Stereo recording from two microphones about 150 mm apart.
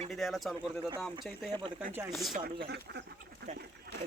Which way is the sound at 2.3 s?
90° right.